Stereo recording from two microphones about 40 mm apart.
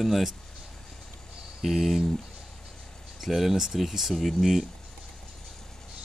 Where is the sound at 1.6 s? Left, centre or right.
Centre.